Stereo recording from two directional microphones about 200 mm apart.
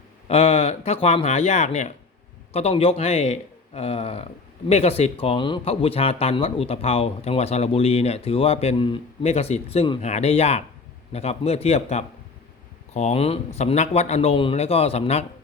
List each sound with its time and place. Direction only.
0.3 s speech: 30° left (ahead or behind)